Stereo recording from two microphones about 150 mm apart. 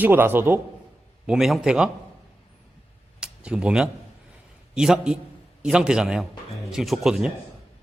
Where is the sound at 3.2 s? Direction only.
5° right (ahead or behind).